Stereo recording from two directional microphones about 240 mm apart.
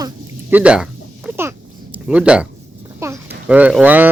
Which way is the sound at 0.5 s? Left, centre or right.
Centre.